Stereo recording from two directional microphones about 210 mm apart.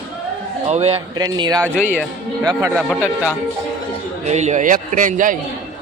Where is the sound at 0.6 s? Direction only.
30° right (ahead or behind).